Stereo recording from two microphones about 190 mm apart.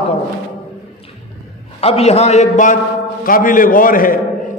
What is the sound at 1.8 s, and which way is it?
A man's voice, 35° left (ahead or behind).